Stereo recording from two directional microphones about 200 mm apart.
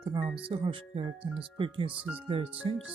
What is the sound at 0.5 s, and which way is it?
Speech, 25° right (ahead or behind).